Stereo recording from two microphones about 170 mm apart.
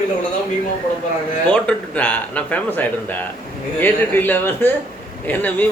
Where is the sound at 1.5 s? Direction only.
5° left (ahead or behind).